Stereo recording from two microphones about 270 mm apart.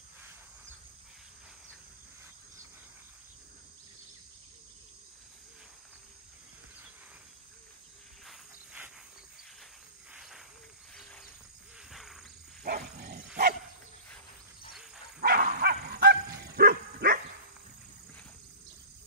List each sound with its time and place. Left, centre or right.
8.3 s cricket: centre
11.9 s wild animals: centre
12.6 s dog: right
15.1 s dog: right